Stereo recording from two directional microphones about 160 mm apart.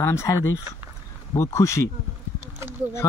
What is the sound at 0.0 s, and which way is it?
Speech, 15° left (ahead or behind).